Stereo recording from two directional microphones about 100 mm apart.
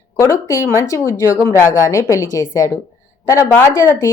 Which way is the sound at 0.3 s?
30° left (ahead or behind).